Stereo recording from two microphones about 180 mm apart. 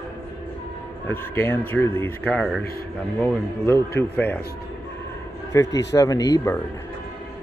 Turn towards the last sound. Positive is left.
turn(degrees=15)  # may be behind; listen again after turning